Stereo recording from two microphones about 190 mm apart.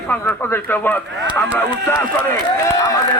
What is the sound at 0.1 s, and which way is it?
A man's voice, 10° left (ahead or behind).